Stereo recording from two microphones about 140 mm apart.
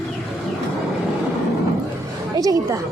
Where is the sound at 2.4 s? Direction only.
25° right (ahead or behind).